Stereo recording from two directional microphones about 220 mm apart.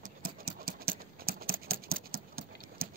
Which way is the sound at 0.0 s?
40° right (ahead or behind).